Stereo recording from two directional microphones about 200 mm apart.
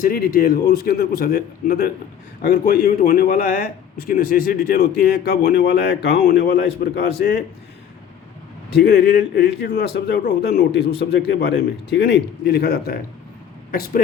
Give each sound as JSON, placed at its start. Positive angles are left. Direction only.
{"t": 0.0, "sound": "a man's voice", "side_deg": 45}
{"t": 8.7, "sound": "a man's voice", "side_deg": 55}